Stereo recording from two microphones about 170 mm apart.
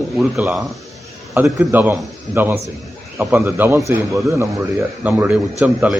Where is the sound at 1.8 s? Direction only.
10° right (ahead or behind).